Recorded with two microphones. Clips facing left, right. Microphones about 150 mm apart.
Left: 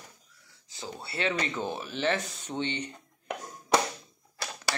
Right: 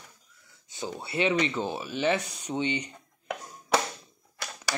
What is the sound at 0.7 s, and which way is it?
Speech, 20° right (ahead or behind).